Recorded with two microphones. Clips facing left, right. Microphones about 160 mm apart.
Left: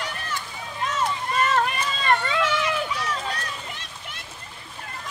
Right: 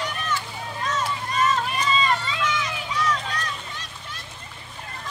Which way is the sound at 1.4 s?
55° left (ahead or behind).